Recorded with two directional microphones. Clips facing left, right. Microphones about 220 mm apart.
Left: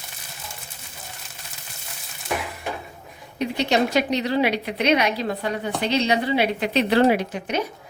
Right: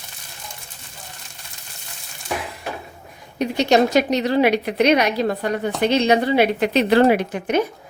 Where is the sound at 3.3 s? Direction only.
45° right (ahead or behind).